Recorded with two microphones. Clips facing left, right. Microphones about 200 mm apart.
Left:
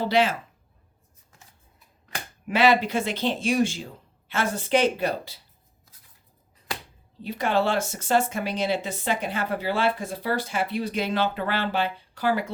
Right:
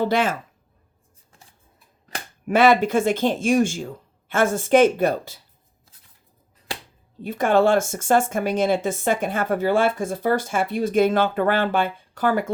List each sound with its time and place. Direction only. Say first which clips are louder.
0.0 s speech: right 1 dB; 50° right (ahead or behind)
2.0 s speech: right 5 dB; 45° right (ahead or behind)
7.2 s speech: right 6 dB; 50° right (ahead or behind)